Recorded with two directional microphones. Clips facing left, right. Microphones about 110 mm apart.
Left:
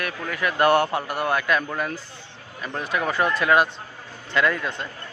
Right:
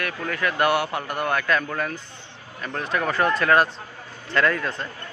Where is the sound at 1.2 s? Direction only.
20° left (ahead or behind).